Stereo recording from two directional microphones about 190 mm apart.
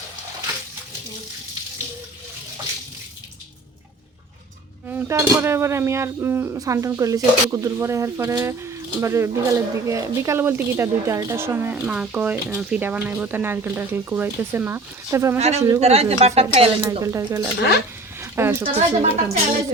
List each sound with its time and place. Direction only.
4.9 s speech: 10° right (ahead or behind)
15.4 s speech: 35° right (ahead or behind)
16.8 s speech: 15° right (ahead or behind)
18.2 s a sound: 15° right (ahead or behind)
18.6 s speech: 35° right (ahead or behind)